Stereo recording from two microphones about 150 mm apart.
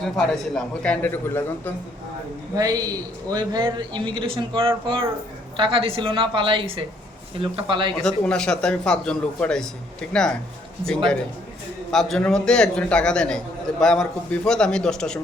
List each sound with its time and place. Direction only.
0.0 s a man's voice: 5° left (ahead or behind)
2.6 s a man's voice: 25° right (ahead or behind)
8.0 s a man's voice: 5° left (ahead or behind)